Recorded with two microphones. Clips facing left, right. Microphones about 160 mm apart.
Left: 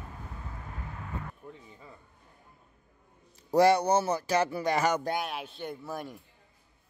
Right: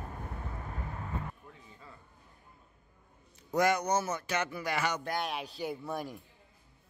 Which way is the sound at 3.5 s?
35° left (ahead or behind).